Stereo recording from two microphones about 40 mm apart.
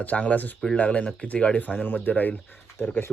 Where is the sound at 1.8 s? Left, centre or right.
Left.